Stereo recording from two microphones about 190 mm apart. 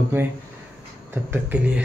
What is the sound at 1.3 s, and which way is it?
Speech, 10° right (ahead or behind).